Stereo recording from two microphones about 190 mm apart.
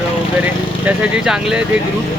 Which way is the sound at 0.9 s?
5° right (ahead or behind).